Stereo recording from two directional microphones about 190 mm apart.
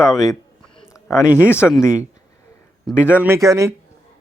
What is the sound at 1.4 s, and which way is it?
Speech, 15° left (ahead or behind).